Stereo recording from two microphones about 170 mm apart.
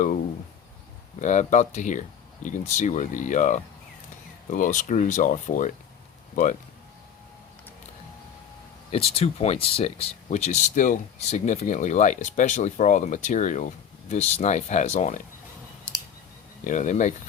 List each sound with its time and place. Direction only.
1.2 s speech: 45° left (ahead or behind)
8.9 s speech: 35° left (ahead or behind)
16.6 s speech: 45° left (ahead or behind)